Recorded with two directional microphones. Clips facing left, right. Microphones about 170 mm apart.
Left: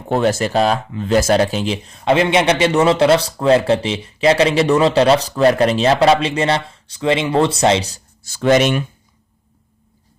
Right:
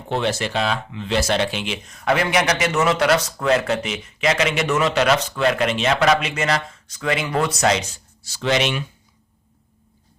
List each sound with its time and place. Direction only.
0.1 s speech: 45° left (ahead or behind)